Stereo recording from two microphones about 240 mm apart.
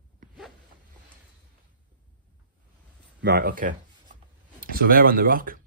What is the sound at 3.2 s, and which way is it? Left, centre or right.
Speech, right.